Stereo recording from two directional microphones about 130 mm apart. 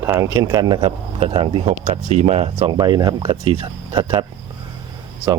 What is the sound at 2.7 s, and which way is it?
Speech, 35° right (ahead or behind).